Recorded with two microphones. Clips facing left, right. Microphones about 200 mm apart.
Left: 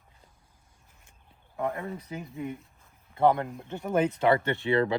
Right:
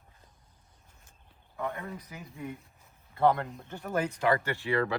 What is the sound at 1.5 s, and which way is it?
A man's voice, 30° left (ahead or behind).